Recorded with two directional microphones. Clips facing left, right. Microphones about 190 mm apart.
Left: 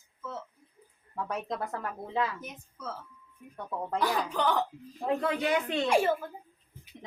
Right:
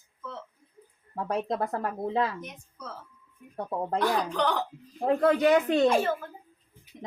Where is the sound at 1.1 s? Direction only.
35° right (ahead or behind).